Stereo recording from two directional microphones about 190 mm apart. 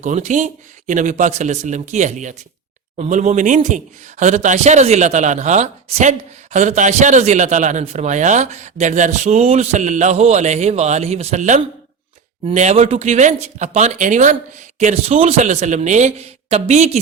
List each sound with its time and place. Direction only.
0.0 s a man's voice: 40° right (ahead or behind)